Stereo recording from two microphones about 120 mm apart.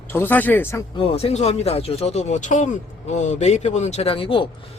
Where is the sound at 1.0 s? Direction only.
55° left (ahead or behind).